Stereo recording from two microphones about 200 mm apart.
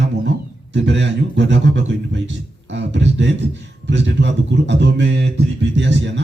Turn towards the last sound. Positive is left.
turn(degrees=-65)  # may be behind; listen again after turning